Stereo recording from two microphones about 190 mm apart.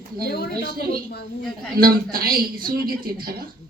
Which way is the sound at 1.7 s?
50° right (ahead or behind).